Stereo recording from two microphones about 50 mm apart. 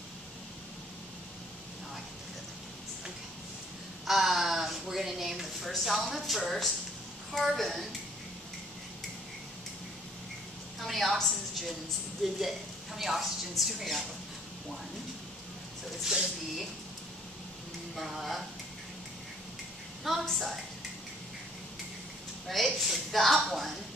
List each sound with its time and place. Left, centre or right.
4.0 s a sound: centre
5.7 s a woman's voice: centre
10.8 s a woman's voice: centre
16.0 s speech: centre
17.9 s a woman's voice: centre
20.3 s a woman's voice: centre
22.5 s a woman's voice: centre